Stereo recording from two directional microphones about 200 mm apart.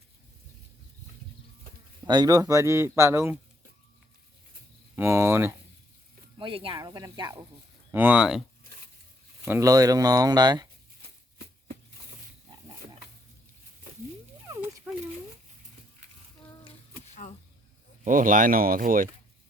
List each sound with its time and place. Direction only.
2.0 s speech: 20° right (ahead or behind)
4.9 s speech: 15° right (ahead or behind)
6.4 s speech: 25° right (ahead or behind)
7.9 s speech: 5° right (ahead or behind)
9.4 s speech: 15° right (ahead or behind)
14.4 s a sound: 10° right (ahead or behind)
17.2 s a sound: 40° left (ahead or behind)
18.0 s speech: 40° right (ahead or behind)